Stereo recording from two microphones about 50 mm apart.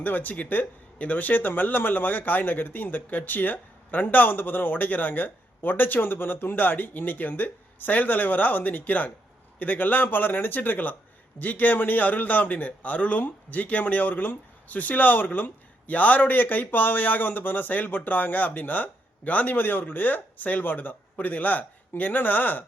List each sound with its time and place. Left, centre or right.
0.0 s a man's voice: left